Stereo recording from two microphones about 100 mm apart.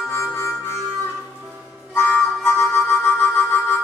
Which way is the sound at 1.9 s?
25° left (ahead or behind).